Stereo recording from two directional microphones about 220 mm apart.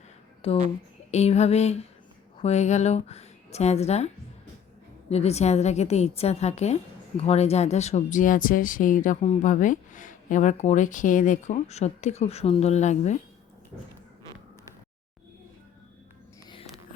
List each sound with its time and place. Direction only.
0.4 s a woman's voice: 25° left (ahead or behind)